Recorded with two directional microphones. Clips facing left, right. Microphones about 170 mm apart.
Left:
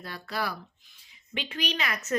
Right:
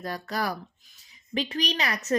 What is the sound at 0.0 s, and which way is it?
A woman's voice, 40° right (ahead or behind).